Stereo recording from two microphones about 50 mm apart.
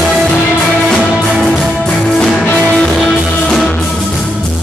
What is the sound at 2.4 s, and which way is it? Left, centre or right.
Music, centre.